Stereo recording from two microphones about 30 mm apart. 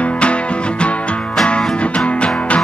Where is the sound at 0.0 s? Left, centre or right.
Left.